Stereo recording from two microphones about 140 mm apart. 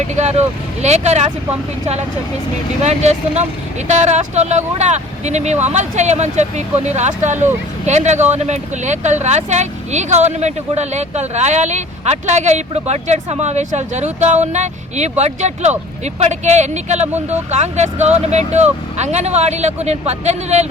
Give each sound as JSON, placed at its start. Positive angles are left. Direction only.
{"t": 0.1, "sound": "speech", "side_deg": -55}
{"t": 2.8, "sound": "speech", "side_deg": -55}